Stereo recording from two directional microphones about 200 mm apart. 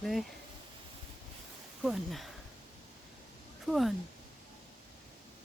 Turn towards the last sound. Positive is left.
turn(degrees=0)  # may be behind; listen again after turning